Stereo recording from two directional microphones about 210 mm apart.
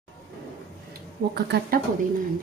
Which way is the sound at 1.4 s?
50° right (ahead or behind).